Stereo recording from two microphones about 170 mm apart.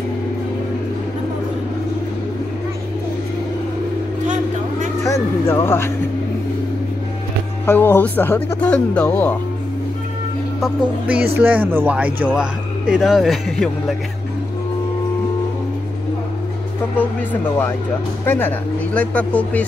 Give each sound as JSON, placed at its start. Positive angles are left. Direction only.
{"t": 5.0, "sound": "speech", "side_deg": 15}
{"t": 7.6, "sound": "speech", "side_deg": 10}
{"t": 11.3, "sound": "speech", "side_deg": -10}
{"t": 17.3, "sound": "speech", "side_deg": 10}